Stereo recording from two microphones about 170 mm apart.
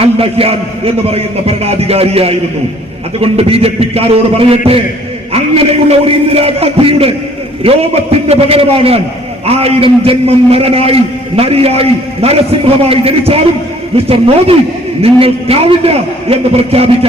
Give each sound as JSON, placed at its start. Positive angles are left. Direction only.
{"t": 0.0, "sound": "a man's voice", "side_deg": -35}
{"t": 6.1, "sound": "a man's voice", "side_deg": -35}